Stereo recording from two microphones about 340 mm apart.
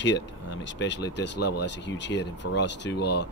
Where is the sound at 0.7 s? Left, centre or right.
Left.